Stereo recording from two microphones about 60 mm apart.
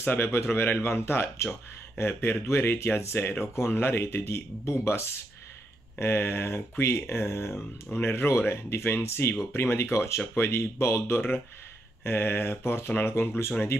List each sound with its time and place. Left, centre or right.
0.0 s speech: left